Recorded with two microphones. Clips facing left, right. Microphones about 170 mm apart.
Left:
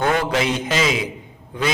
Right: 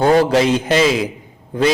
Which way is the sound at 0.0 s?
35° right (ahead or behind).